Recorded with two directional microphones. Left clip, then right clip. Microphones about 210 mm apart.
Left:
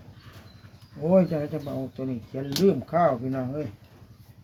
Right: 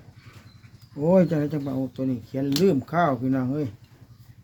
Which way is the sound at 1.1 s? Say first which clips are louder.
Right 1 dB; 55° right (ahead or behind).